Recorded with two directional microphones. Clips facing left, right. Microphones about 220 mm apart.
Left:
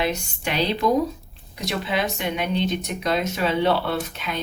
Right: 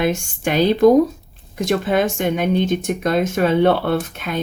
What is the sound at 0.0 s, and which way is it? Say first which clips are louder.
Speech: right 6 dB; 50° right (ahead or behind).